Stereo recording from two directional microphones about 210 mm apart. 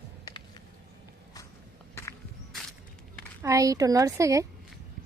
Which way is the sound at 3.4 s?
15° right (ahead or behind).